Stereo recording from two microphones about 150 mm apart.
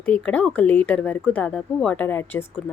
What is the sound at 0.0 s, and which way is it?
Speech, 10° left (ahead or behind).